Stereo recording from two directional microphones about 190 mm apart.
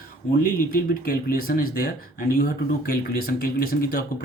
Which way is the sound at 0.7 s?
50° left (ahead or behind).